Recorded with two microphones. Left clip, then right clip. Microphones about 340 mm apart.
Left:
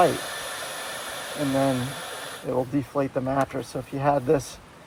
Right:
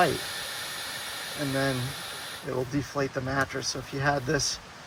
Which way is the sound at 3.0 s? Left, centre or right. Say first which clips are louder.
Left 4 dB; centre.